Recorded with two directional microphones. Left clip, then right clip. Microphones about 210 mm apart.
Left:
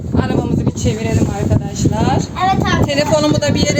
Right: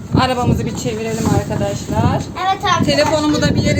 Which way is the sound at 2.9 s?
45° left (ahead or behind).